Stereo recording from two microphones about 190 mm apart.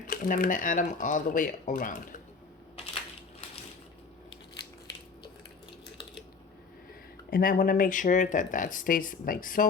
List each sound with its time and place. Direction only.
0.1 s speech: 45° left (ahead or behind)
7.3 s speech: 50° left (ahead or behind)